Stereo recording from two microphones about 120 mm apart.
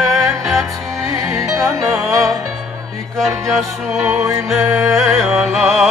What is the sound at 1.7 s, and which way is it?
Music, 25° right (ahead or behind).